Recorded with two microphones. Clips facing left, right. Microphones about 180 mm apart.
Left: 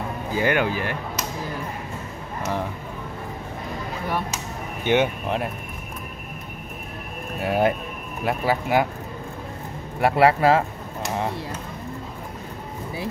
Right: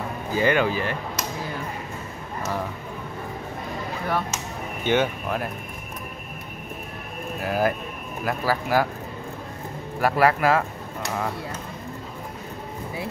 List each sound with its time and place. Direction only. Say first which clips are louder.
0.3 s speech: right 1 dB; 15° left (ahead or behind)
4.8 s speech: left 2 dB; 15° left (ahead or behind)
7.3 s speech: left 3 dB; 25° left (ahead or behind)
9.9 s speech: left 2 dB; 25° left (ahead or behind)